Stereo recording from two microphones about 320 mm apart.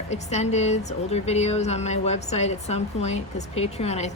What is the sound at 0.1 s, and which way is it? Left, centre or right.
A woman's voice, left.